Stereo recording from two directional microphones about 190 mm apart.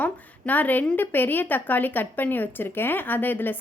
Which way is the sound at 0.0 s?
10° left (ahead or behind).